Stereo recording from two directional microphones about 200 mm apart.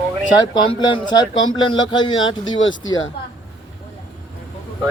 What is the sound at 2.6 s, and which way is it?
Speech, 75° left (ahead or behind).